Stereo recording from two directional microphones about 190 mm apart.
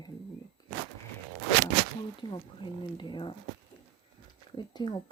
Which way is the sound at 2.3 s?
25° left (ahead or behind).